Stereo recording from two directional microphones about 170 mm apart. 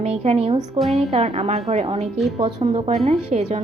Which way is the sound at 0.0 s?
40° right (ahead or behind).